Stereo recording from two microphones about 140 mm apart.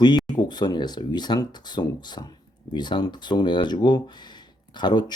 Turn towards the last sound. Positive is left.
turn(degrees=30)  # may be behind; listen again after turning